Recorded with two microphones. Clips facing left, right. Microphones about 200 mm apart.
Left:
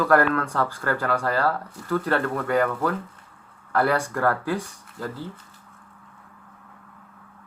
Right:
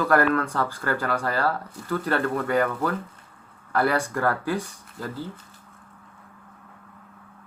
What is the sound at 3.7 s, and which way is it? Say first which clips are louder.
Speech: left 1 dB; 15° right (ahead or behind).